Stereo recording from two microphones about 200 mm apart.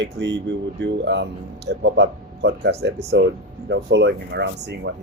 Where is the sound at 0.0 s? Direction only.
60° right (ahead or behind).